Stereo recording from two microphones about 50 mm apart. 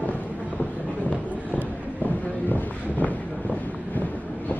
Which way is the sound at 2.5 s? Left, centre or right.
Left.